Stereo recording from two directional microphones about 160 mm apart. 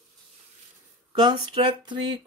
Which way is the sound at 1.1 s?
30° right (ahead or behind).